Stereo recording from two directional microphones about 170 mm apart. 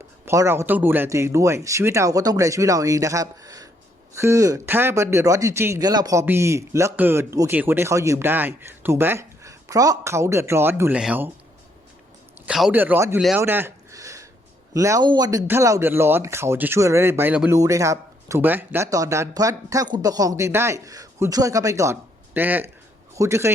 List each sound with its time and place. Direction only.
0.3 s a man's voice: 15° right (ahead or behind)
12.5 s a man's voice: 5° right (ahead or behind)
13.4 s a sound: 15° right (ahead or behind)
14.7 s a man's voice: 20° right (ahead or behind)